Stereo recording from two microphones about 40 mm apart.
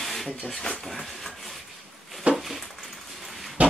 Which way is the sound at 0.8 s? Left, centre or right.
Centre.